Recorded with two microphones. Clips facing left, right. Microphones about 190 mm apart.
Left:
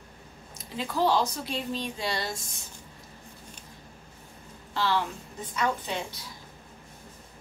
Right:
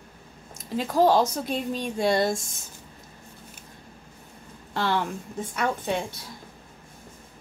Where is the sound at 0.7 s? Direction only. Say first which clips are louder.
Right 5 dB; 45° right (ahead or behind).